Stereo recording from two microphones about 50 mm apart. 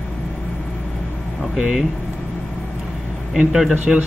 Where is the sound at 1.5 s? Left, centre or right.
Centre.